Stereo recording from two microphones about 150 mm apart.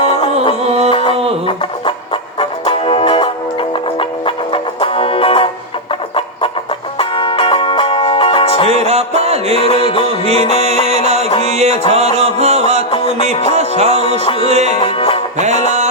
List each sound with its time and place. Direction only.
0.0 s music: 35° left (ahead or behind)
0.6 s music: 45° right (ahead or behind)
0.9 s a sound: 35° left (ahead or behind)
2.4 s music: 35° left (ahead or behind)
7.0 s music: 35° left (ahead or behind)
8.7 s music: 45° right (ahead or behind)
9.6 s music: 35° left (ahead or behind)
10.2 s music: 45° right (ahead or behind)
14.8 s music: 35° left (ahead or behind)
15.4 s music: 50° right (ahead or behind)